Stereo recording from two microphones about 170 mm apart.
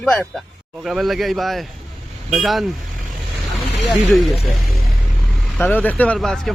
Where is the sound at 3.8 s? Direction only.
Centre (ahead or behind).